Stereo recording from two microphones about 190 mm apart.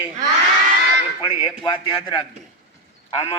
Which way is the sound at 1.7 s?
25° left (ahead or behind).